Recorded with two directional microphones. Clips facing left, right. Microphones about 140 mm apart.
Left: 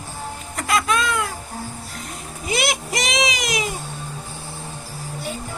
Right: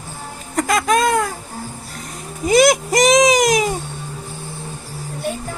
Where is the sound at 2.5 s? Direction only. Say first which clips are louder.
Right 11 dB; 45° right (ahead or behind).